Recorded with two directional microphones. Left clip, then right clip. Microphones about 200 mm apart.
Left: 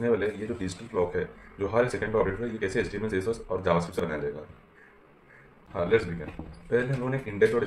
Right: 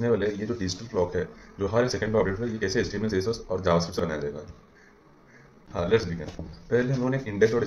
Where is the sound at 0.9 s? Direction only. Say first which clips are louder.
Right 1 dB; 10° right (ahead or behind).